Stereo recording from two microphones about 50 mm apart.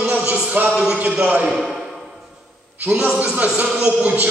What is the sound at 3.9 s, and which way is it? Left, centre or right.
Speech, right.